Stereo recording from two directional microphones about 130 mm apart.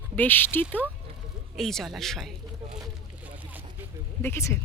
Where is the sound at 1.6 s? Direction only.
Centre (ahead or behind).